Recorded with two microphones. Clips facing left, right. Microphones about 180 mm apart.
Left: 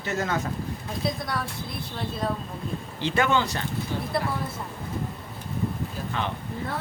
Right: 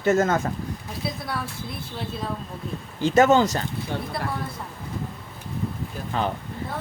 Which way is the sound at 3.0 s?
45° right (ahead or behind).